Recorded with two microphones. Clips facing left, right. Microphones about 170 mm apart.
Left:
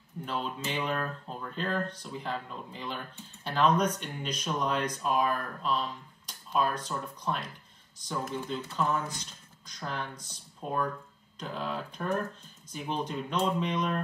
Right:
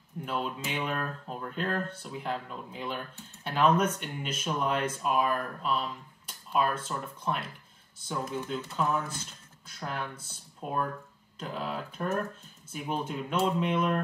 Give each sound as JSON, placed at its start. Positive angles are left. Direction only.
{"t": 0.2, "sound": "speech", "side_deg": -5}